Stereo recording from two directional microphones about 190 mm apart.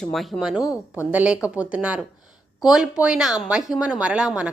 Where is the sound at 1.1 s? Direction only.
5° right (ahead or behind).